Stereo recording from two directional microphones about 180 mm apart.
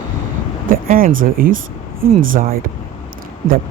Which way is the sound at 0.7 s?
50° right (ahead or behind).